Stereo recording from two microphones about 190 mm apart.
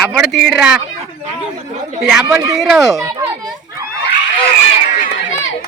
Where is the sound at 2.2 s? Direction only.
15° right (ahead or behind).